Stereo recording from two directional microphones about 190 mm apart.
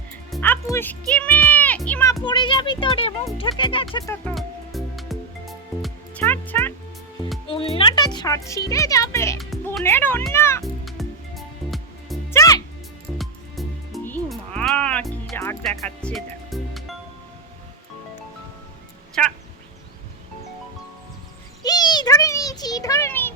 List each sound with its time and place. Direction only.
0.3 s speech: 5° left (ahead or behind)
2.2 s speech: 25° left (ahead or behind)
3.9 s speech: 15° left (ahead or behind)
4.4 s music: centre (ahead or behind)
7.4 s speech: 30° left (ahead or behind); by 10.2 s 10° left (ahead or behind)
10.3 s music: 15° left (ahead or behind)
10.6 s music: centre (ahead or behind)
12.3 s music: 20° left (ahead or behind)
13.1 s music: centre (ahead or behind)
19.2 s cat: 5° left (ahead or behind)
21.6 s a sound: 20° left (ahead or behind)